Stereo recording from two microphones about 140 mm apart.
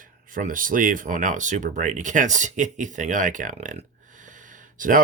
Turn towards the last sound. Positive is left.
turn(degrees=-75)  # may be behind; listen again after turning